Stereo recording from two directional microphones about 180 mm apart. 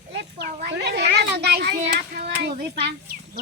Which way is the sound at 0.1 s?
70° right (ahead or behind).